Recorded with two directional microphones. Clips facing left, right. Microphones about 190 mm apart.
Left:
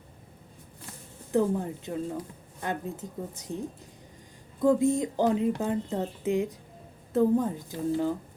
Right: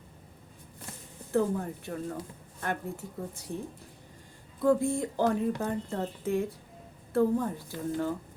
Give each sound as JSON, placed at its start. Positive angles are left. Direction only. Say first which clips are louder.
{"t": 1.3, "sound": "a woman's voice", "louder": "left 2 dB", "side_deg": 15}
{"t": 4.6, "sound": "speech", "louder": "left 3 dB", "side_deg": 20}